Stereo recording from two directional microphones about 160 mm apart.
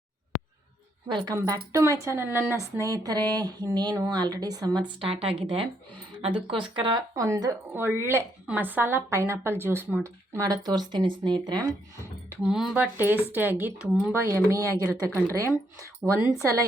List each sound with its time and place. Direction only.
1.0 s a woman's voice: 25° right (ahead or behind)
12.4 s a woman's voice: 5° right (ahead or behind)